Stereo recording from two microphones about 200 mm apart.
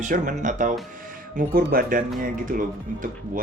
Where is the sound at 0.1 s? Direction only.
40° right (ahead or behind).